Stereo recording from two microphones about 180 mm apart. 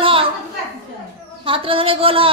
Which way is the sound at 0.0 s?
30° right (ahead or behind).